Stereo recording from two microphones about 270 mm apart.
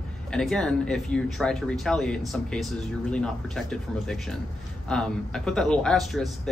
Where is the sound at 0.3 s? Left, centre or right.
Centre.